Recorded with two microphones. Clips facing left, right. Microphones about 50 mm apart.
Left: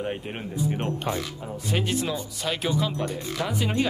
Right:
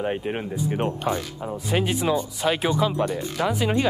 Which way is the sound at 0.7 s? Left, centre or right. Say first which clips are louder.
Right 3 dB; centre.